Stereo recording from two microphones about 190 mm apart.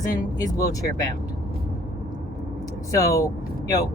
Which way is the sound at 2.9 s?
15° left (ahead or behind).